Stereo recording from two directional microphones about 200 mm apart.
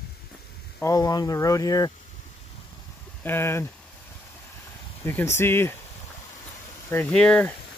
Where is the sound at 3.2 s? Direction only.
10° left (ahead or behind).